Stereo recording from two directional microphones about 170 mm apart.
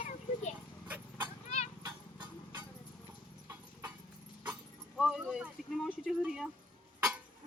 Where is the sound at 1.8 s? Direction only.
25° right (ahead or behind).